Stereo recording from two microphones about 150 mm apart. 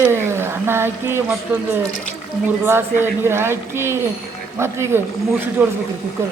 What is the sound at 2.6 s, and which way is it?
Speech, 15° right (ahead or behind).